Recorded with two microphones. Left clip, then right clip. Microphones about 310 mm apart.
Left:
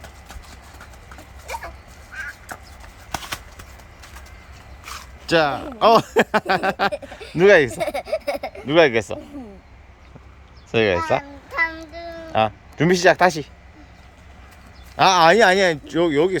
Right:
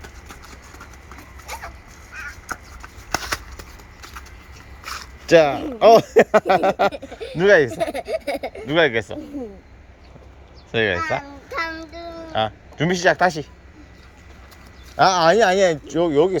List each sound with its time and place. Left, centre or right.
3.1 s shuffling cards: centre
4.8 s a sound: centre
5.3 s speech: centre
10.7 s speech: centre
12.3 s speech: centre
14.9 s speech: centre